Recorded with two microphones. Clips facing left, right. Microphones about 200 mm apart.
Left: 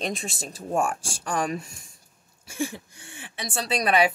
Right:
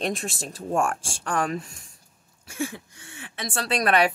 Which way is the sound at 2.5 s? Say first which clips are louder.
Left 1 dB; 30° left (ahead or behind).